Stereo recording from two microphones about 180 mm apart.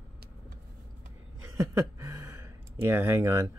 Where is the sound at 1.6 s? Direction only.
15° right (ahead or behind).